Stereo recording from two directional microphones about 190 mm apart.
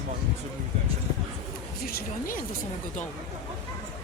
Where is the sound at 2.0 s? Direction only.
45° left (ahead or behind).